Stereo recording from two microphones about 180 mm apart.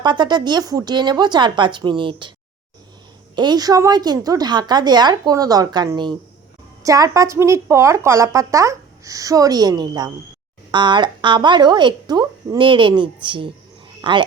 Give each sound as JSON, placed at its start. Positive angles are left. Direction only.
{"t": 0.0, "sound": "a woman's voice", "side_deg": -25}
{"t": 3.3, "sound": "a woman's voice", "side_deg": -25}